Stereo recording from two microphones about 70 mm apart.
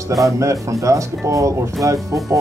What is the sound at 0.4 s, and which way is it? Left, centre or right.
Speech, right.